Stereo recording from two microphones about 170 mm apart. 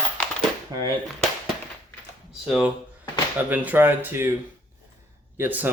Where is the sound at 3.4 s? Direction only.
10° right (ahead or behind).